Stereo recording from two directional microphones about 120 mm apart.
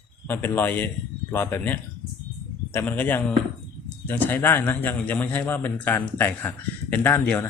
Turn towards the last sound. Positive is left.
turn(degrees=15)  # may be behind; listen again after turning